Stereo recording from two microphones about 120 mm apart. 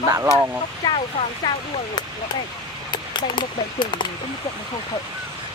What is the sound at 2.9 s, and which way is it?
Speech, 40° left (ahead or behind).